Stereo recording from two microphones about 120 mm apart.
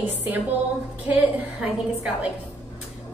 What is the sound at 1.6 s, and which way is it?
Speech, 10° right (ahead or behind).